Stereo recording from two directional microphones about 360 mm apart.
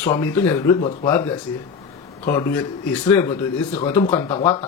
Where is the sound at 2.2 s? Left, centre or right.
Centre.